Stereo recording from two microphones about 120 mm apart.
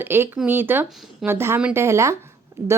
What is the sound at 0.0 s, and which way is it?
A woman's voice, 20° right (ahead or behind).